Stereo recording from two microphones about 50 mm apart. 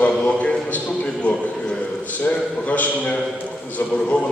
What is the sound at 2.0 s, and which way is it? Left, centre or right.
A man's voice, left.